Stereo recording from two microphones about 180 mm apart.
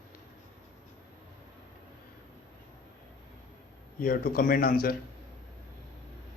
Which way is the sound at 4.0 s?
55° left (ahead or behind).